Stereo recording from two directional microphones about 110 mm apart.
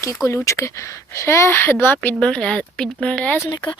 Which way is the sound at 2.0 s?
10° left (ahead or behind).